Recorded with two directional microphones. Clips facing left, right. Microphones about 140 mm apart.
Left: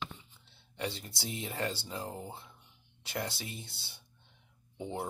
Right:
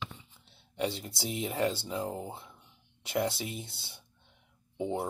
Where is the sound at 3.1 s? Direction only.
25° right (ahead or behind).